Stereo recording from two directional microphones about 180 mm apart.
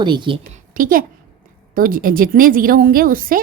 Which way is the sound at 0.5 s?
50° right (ahead or behind).